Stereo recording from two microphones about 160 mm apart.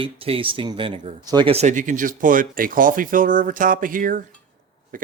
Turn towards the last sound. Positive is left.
turn(degrees=-60)  # may be behind; listen again after turning